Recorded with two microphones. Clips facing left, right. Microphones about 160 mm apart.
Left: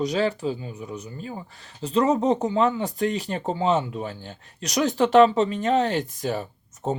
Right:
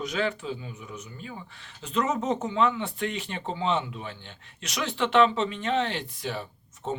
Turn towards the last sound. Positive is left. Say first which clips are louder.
# left 5 dB
turn(degrees=40)  # may be behind; listen again after turning